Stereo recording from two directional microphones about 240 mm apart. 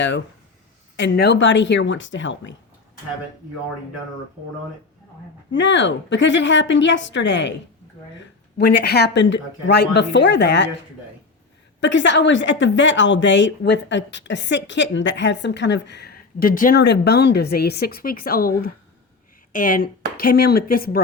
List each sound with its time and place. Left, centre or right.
0.9 s a woman's voice: left
5.5 s a woman's voice: left
11.8 s a woman's voice: left